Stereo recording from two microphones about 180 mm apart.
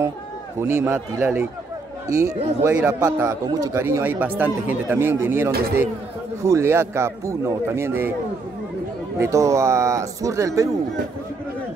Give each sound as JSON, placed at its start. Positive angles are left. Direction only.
{"t": 0.6, "sound": "speech", "side_deg": -15}
{"t": 9.2, "sound": "speech", "side_deg": -15}